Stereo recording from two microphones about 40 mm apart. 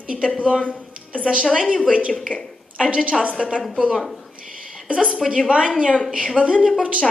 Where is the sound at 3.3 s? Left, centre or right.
Right.